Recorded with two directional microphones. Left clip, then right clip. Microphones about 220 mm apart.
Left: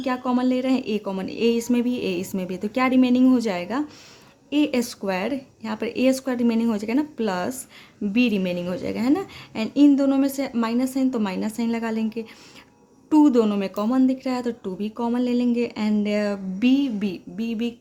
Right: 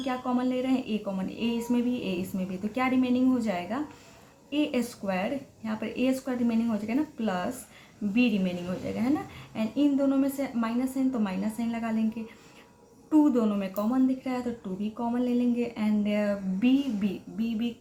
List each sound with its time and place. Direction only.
0.0 s speech: 50° left (ahead or behind)